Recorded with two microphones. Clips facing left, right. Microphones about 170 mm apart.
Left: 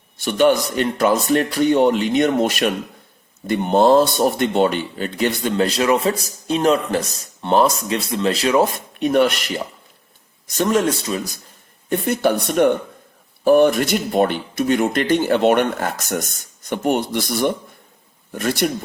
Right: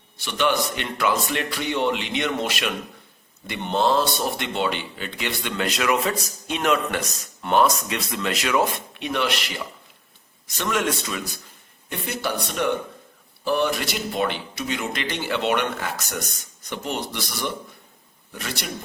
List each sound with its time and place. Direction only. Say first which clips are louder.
0.2 s speech: left 7 dB; 45° left (ahead or behind)
11.9 s speech: left 10 dB; 50° left (ahead or behind)